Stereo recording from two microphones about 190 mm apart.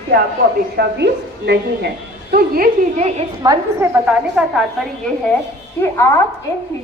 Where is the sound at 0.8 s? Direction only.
60° right (ahead or behind).